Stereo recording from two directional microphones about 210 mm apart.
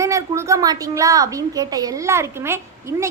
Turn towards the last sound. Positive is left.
turn(degrees=-10)  # may be behind; listen again after turning